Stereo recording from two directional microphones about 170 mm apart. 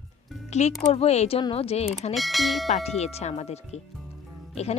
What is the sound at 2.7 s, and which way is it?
Speech, 40° left (ahead or behind).